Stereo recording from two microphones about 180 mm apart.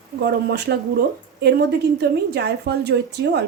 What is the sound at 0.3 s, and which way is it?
A woman's voice, 70° right (ahead or behind).